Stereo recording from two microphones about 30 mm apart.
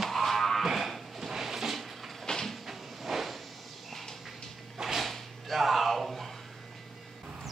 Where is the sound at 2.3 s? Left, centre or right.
Left.